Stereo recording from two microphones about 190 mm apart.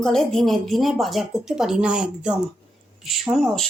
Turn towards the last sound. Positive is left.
turn(degrees=0)  # may be behind; listen again after turning